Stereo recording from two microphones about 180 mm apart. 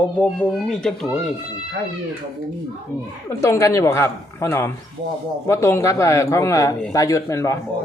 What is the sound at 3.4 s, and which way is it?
Speech, 15° left (ahead or behind).